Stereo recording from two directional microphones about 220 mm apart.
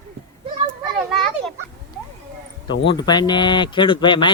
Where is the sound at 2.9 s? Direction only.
20° left (ahead or behind).